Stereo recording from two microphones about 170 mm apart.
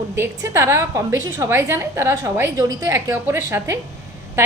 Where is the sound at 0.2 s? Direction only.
15° right (ahead or behind).